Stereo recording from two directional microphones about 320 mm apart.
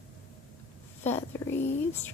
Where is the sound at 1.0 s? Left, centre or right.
Centre.